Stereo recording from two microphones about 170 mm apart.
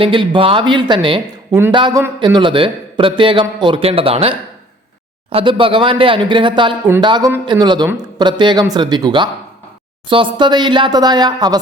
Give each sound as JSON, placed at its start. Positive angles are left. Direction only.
{"t": 0.0, "sound": "speech", "side_deg": -30}